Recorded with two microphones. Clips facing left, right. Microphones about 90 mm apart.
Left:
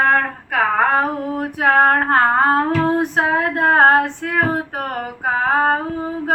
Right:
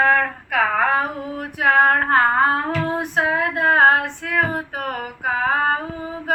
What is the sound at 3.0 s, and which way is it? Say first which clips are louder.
Female singing: left 3 dB; 40° left (ahead or behind).